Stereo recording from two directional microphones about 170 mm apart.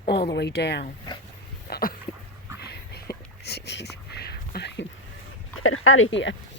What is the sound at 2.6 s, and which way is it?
Whispering, 70° left (ahead or behind).